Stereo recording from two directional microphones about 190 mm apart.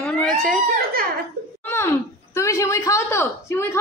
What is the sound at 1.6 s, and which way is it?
A woman's voice, 10° left (ahead or behind).